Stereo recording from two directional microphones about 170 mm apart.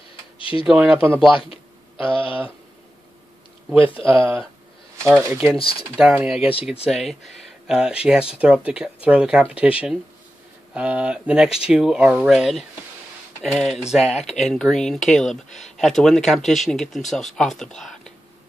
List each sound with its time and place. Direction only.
0.4 s tick-tock: 30° left (ahead or behind)
0.7 s speech: 10° right (ahead or behind)
1.5 s a sound: 30° left (ahead or behind)
5.3 s speech: 10° right (ahead or behind)
14.0 s speech: 40° left (ahead or behind)
14.4 s speech: 5° left (ahead or behind)